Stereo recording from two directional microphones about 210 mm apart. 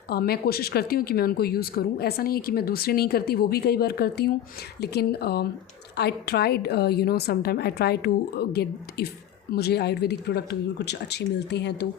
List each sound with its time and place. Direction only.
0.1 s speech: 45° left (ahead or behind)